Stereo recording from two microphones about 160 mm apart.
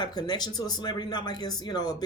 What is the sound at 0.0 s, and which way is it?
Speech, 25° left (ahead or behind).